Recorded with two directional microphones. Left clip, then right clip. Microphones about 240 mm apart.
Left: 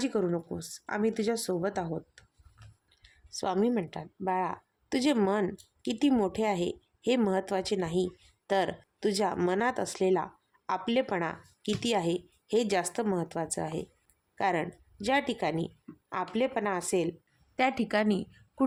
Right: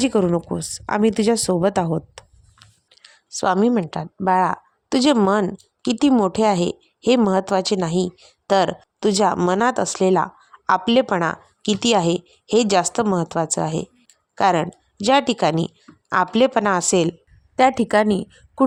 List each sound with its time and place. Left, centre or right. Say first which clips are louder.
0.0 s speech: right 11 dB; right
2.9 s speech: right 10 dB; right